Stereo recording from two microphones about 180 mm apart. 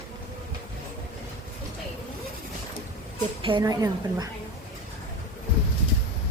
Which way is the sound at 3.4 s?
25° right (ahead or behind).